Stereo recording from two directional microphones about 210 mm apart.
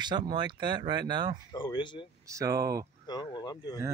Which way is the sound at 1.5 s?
20° left (ahead or behind).